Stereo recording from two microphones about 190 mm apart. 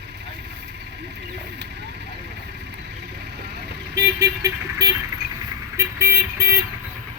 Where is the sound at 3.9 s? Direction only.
15° right (ahead or behind).